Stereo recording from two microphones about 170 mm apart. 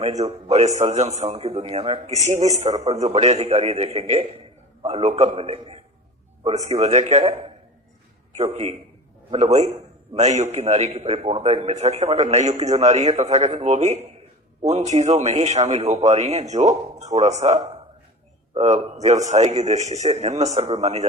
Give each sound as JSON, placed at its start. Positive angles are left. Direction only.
{"t": 0.0, "sound": "a man's voice", "side_deg": -40}
{"t": 8.4, "sound": "a man's voice", "side_deg": -40}